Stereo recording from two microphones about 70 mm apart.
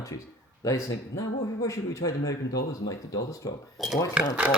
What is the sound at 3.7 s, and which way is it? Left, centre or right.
Speech, centre.